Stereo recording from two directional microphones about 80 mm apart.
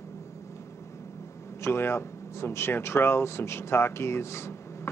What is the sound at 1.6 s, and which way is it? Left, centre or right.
Speech, left.